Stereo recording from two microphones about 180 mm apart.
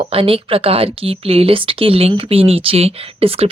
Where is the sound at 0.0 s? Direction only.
30° right (ahead or behind).